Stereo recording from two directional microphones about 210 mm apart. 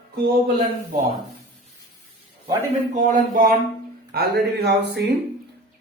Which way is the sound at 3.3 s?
40° right (ahead or behind).